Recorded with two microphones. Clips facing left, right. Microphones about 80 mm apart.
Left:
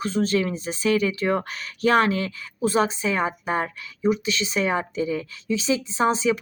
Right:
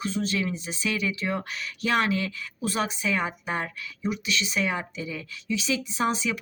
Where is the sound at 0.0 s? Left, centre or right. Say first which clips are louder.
Left 5 dB; left.